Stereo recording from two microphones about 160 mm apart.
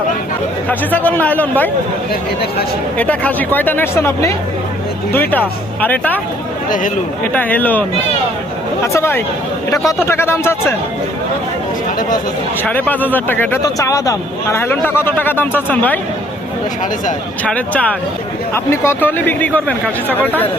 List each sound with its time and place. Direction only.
0.7 s speech: 10° left (ahead or behind)
3.0 s speech: 10° left (ahead or behind)
7.3 s speech: 10° left (ahead or behind)
12.6 s speech: 10° left (ahead or behind)
17.4 s speech: 10° left (ahead or behind)